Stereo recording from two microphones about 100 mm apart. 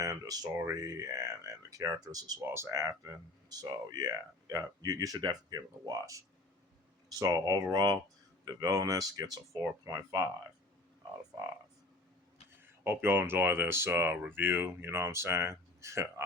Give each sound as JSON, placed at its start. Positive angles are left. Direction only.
{"t": 0.0, "sound": "speech", "side_deg": -35}
{"t": 2.4, "sound": "speech", "side_deg": -25}
{"t": 12.6, "sound": "speech", "side_deg": -20}